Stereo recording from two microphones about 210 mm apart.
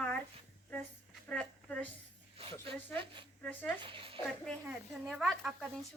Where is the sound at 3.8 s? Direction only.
25° right (ahead or behind).